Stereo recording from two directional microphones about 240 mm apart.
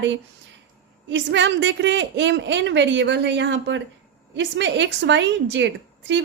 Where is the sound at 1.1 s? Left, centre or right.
Right.